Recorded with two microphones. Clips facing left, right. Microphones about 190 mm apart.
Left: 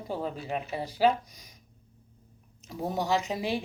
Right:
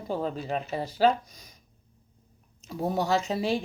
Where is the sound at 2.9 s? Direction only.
15° left (ahead or behind).